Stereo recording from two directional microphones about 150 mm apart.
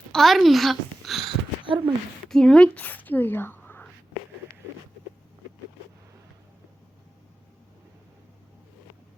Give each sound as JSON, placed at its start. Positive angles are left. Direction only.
{"t": 0.1, "sound": "speech", "side_deg": 0}
{"t": 1.2, "sound": "a sound", "side_deg": -35}
{"t": 2.2, "sound": "speech", "side_deg": 5}